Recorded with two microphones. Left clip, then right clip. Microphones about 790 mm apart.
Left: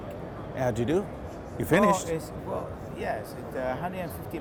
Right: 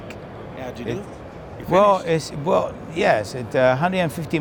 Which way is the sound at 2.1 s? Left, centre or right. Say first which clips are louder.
Right 12 dB; right.